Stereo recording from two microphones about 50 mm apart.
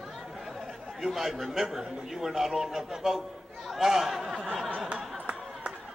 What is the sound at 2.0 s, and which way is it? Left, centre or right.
A man's voice, centre.